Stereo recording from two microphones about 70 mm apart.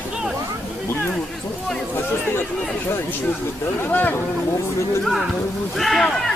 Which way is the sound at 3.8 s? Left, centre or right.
Left.